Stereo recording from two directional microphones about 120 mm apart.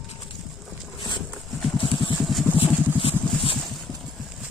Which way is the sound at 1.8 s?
40° left (ahead or behind).